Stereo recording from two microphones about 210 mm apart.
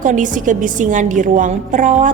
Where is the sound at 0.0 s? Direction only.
40° right (ahead or behind).